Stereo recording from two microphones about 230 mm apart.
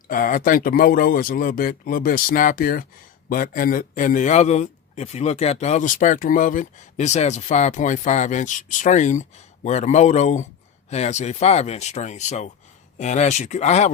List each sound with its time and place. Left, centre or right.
0.1 s a man's voice: left